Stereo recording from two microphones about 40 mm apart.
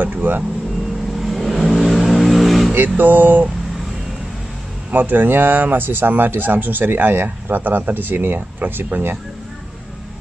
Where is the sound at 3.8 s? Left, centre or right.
Centre.